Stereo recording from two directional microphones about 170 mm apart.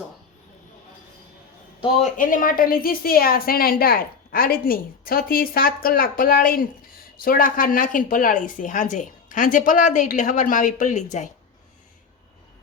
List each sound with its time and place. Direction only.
2.0 s a woman's voice: 50° left (ahead or behind)